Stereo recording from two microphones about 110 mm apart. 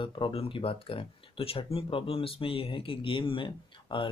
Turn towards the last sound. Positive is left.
turn(degrees=50)  # may be behind; listen again after turning